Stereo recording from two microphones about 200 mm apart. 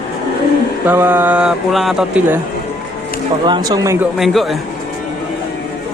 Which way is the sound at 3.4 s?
20° right (ahead or behind).